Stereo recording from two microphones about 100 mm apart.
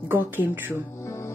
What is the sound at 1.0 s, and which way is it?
Music, 30° left (ahead or behind).